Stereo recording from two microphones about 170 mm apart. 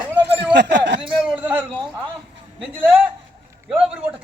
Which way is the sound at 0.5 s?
90° right.